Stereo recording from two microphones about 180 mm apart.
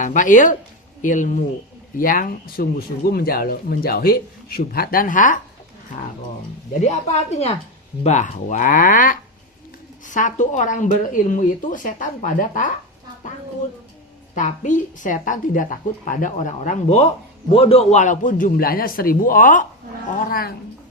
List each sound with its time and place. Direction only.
0.0 s a woman's voice: 45° left (ahead or behind)
6.8 s a woman's voice: 40° left (ahead or behind)
14.3 s a woman's voice: 45° left (ahead or behind)